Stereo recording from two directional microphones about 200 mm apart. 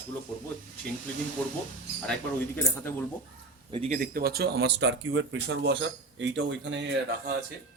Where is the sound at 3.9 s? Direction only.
45° right (ahead or behind); by 6.8 s 65° right (ahead or behind).